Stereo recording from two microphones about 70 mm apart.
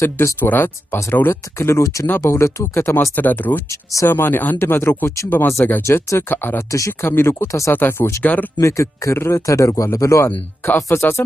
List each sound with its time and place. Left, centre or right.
0.0 s speech: left
0.4 s speech: left
1.8 s speech: left
3.2 s speech: left
7.7 s speech: left
8.5 s speech: left
10.2 s speech: left